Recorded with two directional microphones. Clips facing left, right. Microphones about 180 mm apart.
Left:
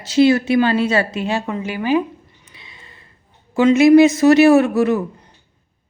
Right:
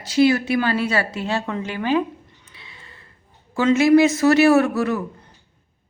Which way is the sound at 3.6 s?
20° left (ahead or behind).